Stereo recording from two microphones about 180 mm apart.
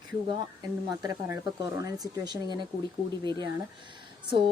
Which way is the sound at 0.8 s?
20° right (ahead or behind).